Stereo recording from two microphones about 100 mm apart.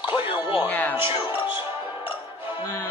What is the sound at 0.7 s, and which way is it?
Music, 15° left (ahead or behind).